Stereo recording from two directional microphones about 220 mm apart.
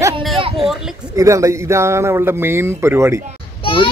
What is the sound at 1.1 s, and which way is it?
Speech, 15° right (ahead or behind).